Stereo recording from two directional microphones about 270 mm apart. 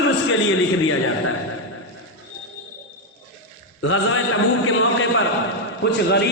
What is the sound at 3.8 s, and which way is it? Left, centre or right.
A man's voice, left.